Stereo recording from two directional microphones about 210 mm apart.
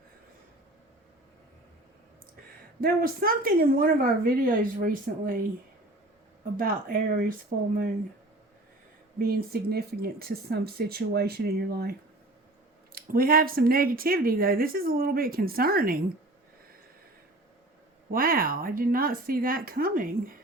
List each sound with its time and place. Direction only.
2.8 s speech: 45° right (ahead or behind)
6.6 s speech: 45° right (ahead or behind)
9.1 s speech: 45° right (ahead or behind)
18.1 s speech: 45° right (ahead or behind)